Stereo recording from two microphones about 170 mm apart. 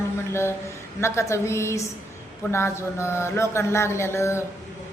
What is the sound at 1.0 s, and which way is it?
Speech, 15° left (ahead or behind).